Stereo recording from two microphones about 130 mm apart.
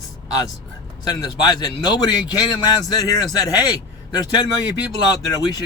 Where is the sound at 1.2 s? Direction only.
35° left (ahead or behind).